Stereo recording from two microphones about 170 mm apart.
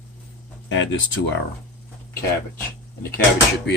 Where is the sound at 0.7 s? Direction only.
90° left.